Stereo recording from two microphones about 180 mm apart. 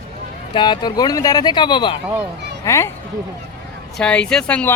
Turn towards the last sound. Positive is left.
turn(degrees=5)  # may be behind; listen again after turning